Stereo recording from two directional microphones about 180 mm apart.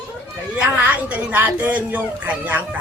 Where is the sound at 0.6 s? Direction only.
10° right (ahead or behind).